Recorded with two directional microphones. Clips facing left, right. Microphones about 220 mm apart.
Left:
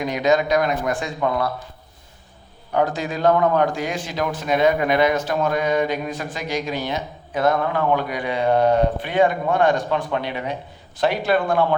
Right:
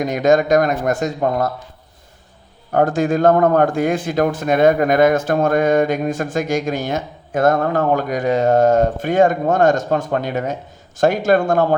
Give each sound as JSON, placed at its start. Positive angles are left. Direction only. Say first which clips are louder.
{"t": 0.0, "sound": "a man's voice", "louder": "right 4 dB", "side_deg": -45}
{"t": 2.7, "sound": "a man's voice", "louder": "right 6 dB", "side_deg": -50}